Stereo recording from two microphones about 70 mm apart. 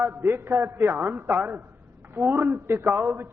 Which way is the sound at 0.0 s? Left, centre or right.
Right.